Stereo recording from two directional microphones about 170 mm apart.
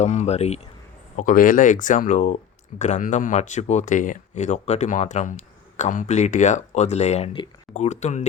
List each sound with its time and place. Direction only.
0.0 s speech: 45° left (ahead or behind)
1.1 s speech: 55° left (ahead or behind)